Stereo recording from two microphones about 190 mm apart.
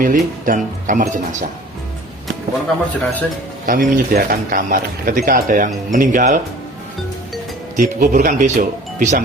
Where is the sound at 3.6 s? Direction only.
45° right (ahead or behind).